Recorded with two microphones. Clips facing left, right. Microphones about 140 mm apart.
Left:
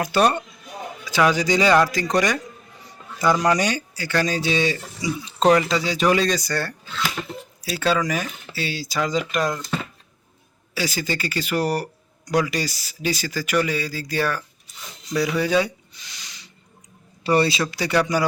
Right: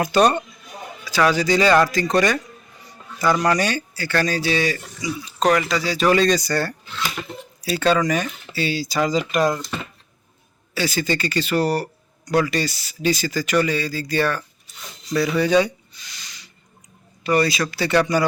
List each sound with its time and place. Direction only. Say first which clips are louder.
0.0 s speech: right 2 dB; 5° left (ahead or behind)
1.0 s speech: right 1 dB; 15° left (ahead or behind)
3.4 s a man's voice: even; 15° left (ahead or behind)
6.5 s speech: right 3 dB; 5° right (ahead or behind)
10.8 s speech: right 3 dB; 10° left (ahead or behind)
17.2 s a man's voice: even; 30° left (ahead or behind)
17.7 s speech: right 3 dB; 10° left (ahead or behind)